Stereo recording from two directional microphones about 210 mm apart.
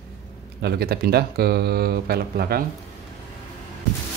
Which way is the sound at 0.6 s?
50° right (ahead or behind).